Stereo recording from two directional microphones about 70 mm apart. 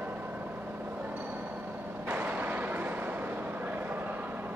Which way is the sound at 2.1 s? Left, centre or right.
Right.